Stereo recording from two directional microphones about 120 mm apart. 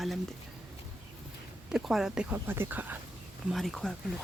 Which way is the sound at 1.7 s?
5° right (ahead or behind).